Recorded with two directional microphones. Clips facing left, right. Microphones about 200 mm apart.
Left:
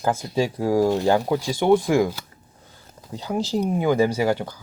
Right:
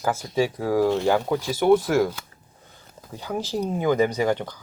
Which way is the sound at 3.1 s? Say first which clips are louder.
Left 3 dB; 15° left (ahead or behind).